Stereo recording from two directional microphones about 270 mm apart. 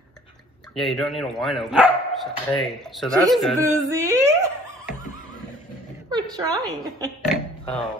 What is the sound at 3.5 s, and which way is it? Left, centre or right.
Speech, centre.